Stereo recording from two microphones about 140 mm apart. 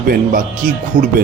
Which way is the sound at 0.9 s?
75° right (ahead or behind).